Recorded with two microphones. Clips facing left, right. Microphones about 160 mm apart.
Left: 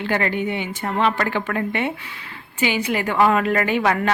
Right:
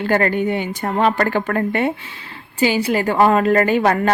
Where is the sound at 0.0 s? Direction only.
45° right (ahead or behind).